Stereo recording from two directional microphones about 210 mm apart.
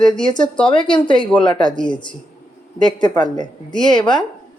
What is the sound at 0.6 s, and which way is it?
Speech, 20° left (ahead or behind).